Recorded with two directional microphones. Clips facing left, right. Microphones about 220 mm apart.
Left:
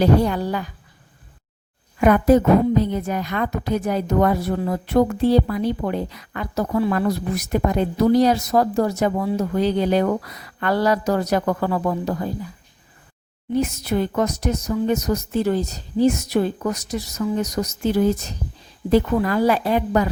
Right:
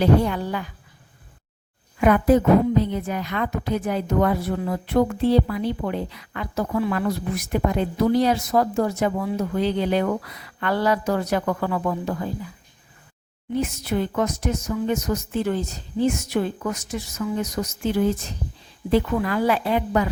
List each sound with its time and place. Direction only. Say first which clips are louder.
0.0 s a woman's voice: left 2 dB; 40° left (ahead or behind)
2.0 s a woman's voice: left 2 dB; 40° left (ahead or behind)
13.5 s a woman's voice: left 3 dB; 40° left (ahead or behind)